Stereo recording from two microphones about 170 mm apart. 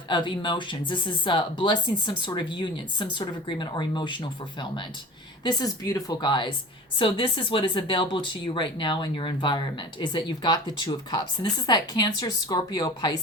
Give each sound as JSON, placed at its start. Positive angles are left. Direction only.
{"t": 0.1, "sound": "speech", "side_deg": 30}
{"t": 5.4, "sound": "speech", "side_deg": 25}